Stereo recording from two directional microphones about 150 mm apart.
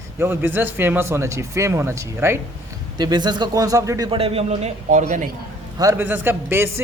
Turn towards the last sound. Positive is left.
turn(degrees=-15)  # may be behind; listen again after turning